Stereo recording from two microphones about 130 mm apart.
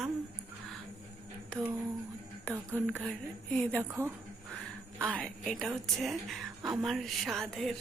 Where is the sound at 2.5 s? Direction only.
15° right (ahead or behind).